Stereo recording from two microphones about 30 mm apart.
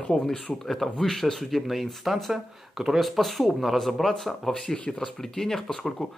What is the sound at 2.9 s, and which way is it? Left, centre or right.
Speech, centre.